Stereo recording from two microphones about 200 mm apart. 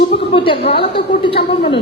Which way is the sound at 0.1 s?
25° left (ahead or behind).